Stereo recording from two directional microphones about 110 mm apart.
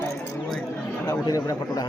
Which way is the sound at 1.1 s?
30° left (ahead or behind).